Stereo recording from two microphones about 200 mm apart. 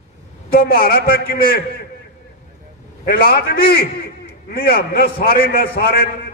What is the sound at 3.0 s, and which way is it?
A man's voice, 50° left (ahead or behind).